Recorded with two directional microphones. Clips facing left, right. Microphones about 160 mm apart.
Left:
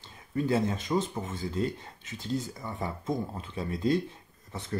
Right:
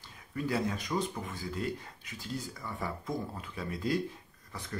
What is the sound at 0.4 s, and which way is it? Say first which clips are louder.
Speech: left 5 dB; 25° left (ahead or behind).